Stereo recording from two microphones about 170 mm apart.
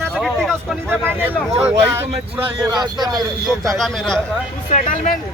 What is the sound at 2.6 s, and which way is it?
Speech, 25° right (ahead or behind).